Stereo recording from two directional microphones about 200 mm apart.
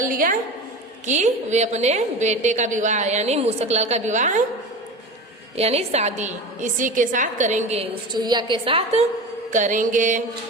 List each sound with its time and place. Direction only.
0.0 s a woman's voice: 45° right (ahead or behind)
5.5 s a woman's voice: 30° right (ahead or behind)
8.1 s a woman's voice: 20° right (ahead or behind); by 10.2 s 40° right (ahead or behind)